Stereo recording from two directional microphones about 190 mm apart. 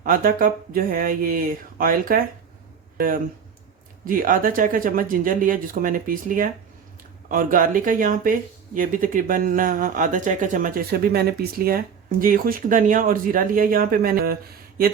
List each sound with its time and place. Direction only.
0.0 s speech: 50° right (ahead or behind)
4.0 s speech: 45° right (ahead or behind)